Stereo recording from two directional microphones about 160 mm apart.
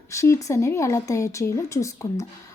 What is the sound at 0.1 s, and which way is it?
Speech, 20° left (ahead or behind).